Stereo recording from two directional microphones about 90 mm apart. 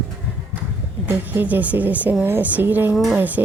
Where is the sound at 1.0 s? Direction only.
20° right (ahead or behind).